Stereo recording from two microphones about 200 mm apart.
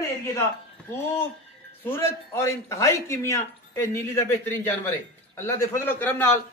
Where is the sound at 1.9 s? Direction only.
15° left (ahead or behind).